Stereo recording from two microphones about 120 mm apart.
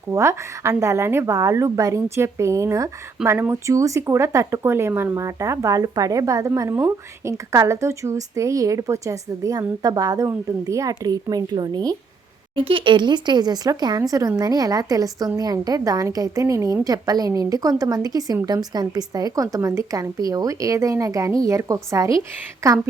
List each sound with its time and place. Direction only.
0.1 s speech: 25° right (ahead or behind)
12.5 s speech: 45° right (ahead or behind); by 22.8 s 25° right (ahead or behind)